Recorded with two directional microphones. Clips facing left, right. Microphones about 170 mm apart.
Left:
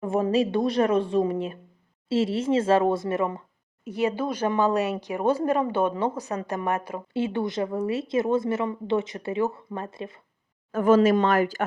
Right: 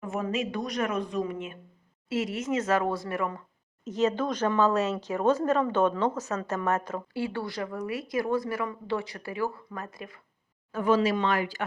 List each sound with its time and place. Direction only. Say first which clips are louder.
0.0 s a woman's voice: left 7 dB; 30° left (ahead or behind)
3.8 s a woman's voice: left 1 dB; 10° left (ahead or behind); by 10.2 s 25° left (ahead or behind)
10.7 s speech: left 6 dB; 50° left (ahead or behind)